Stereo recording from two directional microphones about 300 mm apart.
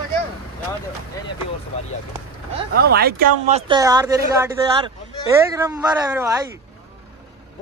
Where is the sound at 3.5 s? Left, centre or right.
Centre.